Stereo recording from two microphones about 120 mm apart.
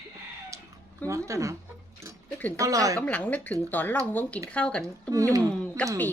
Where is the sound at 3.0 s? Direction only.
10° left (ahead or behind).